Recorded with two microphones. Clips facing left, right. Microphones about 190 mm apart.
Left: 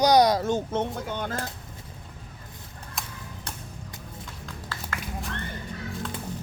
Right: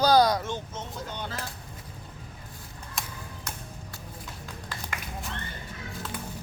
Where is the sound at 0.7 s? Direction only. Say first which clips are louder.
Left 9 dB; 55° left (ahead or behind).